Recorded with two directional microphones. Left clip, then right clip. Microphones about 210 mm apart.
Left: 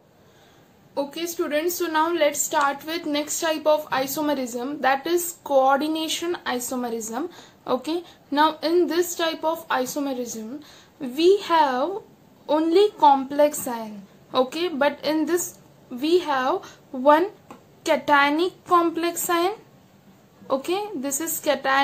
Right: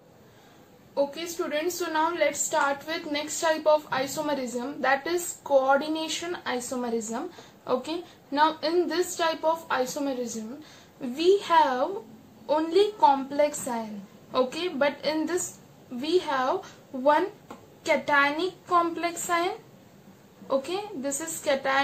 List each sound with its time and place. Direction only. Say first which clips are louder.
0.9 s a woman's voice: left 1 dB; 40° left (ahead or behind)